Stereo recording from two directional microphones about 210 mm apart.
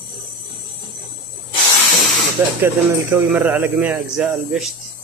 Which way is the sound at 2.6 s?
10° right (ahead or behind).